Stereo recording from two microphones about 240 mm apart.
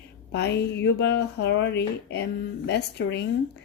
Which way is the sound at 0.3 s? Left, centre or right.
Left.